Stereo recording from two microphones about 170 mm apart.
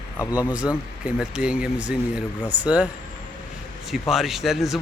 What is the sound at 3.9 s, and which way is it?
Speech, centre (ahead or behind).